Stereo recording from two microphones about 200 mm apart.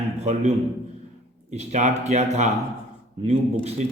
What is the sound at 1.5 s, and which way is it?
Speech, 35° right (ahead or behind).